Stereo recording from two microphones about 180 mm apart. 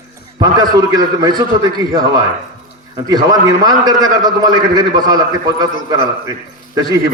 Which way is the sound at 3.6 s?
20° right (ahead or behind).